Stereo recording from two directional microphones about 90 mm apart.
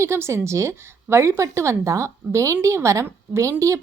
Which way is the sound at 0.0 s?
30° right (ahead or behind).